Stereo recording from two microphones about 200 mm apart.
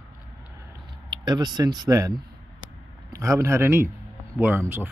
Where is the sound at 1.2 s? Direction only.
20° right (ahead or behind).